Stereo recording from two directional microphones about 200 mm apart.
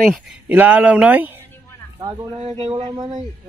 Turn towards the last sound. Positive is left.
turn(degrees=-20)  # may be behind; listen again after turning